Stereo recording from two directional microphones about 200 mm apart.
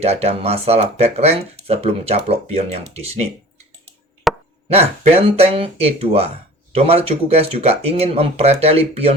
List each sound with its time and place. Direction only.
0.0 s speech: 30° right (ahead or behind)
4.3 s chopping: centre (ahead or behind)
4.7 s speech: 30° right (ahead or behind)